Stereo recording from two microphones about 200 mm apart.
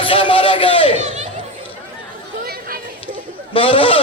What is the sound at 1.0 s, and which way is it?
Speech, 35° right (ahead or behind).